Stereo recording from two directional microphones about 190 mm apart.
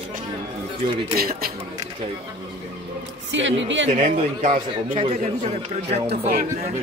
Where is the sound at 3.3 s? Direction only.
75° right (ahead or behind).